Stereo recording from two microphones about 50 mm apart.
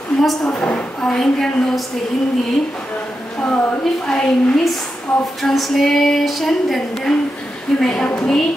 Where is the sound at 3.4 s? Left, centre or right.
Left.